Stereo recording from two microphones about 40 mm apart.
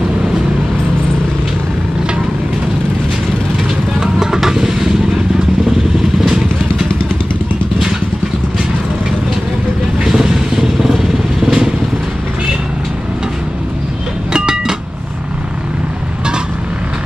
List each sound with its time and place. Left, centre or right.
4.0 s vehicle: centre
10.0 s vehicle: centre
14.3 s train: centre